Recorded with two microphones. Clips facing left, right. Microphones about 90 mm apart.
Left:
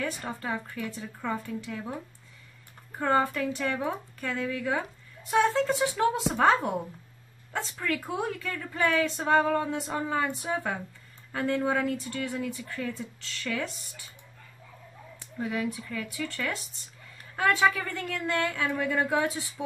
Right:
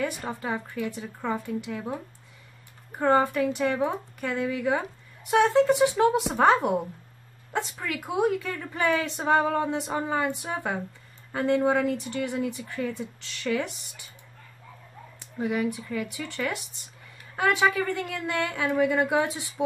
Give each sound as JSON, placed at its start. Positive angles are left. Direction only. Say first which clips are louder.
{"t": 0.3, "sound": "speech", "louder": "right 2 dB", "side_deg": -15}
{"t": 3.0, "sound": "speech", "louder": "right 4 dB", "side_deg": -20}
{"t": 15.1, "sound": "speech", "louder": "right 4 dB", "side_deg": -15}